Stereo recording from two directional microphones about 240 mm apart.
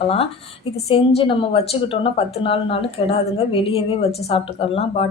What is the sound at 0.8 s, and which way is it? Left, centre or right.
A woman's voice, left.